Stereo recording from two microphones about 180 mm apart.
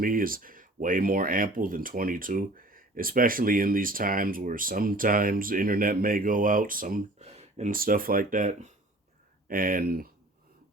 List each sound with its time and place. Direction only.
0.0 s speech: 50° right (ahead or behind)